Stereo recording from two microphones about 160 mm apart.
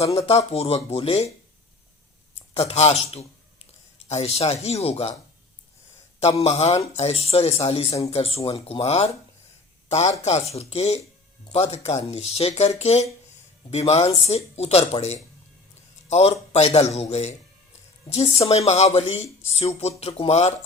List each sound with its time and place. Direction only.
0.0 s speech: 40° left (ahead or behind)
2.6 s a man's voice: 40° left (ahead or behind)
6.1 s speech: 40° left (ahead or behind)
10.2 s a man's voice: 40° left (ahead or behind)